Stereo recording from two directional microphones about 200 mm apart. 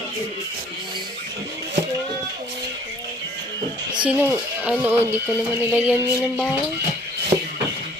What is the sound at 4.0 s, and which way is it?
Speech, 10° right (ahead or behind).